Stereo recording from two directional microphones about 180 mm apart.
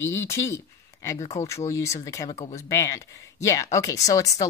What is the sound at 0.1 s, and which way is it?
Speech, 15° left (ahead or behind).